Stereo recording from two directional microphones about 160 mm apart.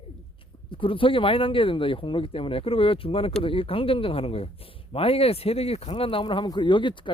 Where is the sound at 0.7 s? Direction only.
35° left (ahead or behind).